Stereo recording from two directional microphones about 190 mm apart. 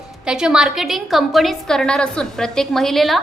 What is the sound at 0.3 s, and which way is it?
A woman's voice, 5° right (ahead or behind).